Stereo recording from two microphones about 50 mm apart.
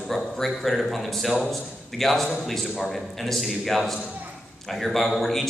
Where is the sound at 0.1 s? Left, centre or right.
Centre.